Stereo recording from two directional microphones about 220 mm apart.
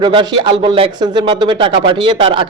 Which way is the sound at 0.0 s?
20° right (ahead or behind).